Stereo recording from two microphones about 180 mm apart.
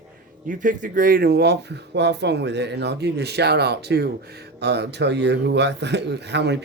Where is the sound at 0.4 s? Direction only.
45° right (ahead or behind).